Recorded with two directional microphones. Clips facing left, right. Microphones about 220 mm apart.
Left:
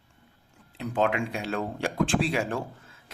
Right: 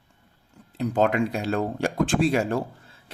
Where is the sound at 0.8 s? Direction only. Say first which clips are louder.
Right 4 dB; 40° right (ahead or behind).